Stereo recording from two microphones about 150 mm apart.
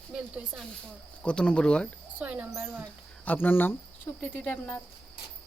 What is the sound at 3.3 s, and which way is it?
Speech, 15° left (ahead or behind).